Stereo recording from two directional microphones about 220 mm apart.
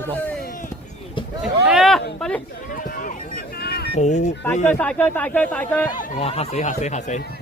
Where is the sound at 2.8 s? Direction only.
40° left (ahead or behind).